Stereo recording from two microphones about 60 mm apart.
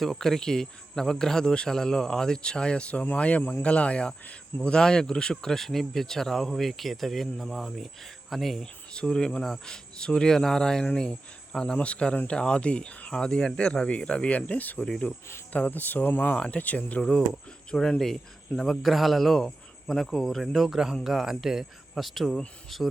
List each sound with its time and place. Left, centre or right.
0.0 s speech: centre
8.9 s speech: centre